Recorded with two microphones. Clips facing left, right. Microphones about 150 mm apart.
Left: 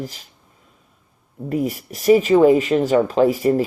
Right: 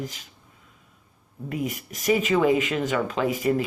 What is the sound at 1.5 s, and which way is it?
Speech, 40° left (ahead or behind).